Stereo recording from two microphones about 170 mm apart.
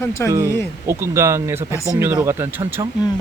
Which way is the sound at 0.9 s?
15° right (ahead or behind).